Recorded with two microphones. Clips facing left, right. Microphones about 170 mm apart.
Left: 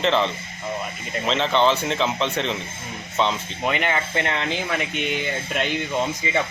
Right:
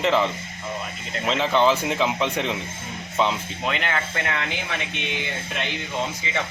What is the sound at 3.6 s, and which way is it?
Speech, 15° left (ahead or behind).